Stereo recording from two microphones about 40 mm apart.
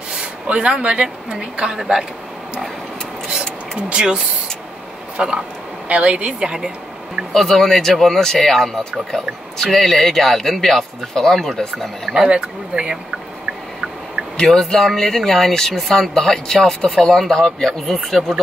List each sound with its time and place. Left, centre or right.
0.2 s a sound: right
0.7 s a woman's voice: right
3.9 s a woman's voice: right
5.9 s speech: right
7.3 s speech: centre
12.1 s a woman's voice: right
14.3 s speech: centre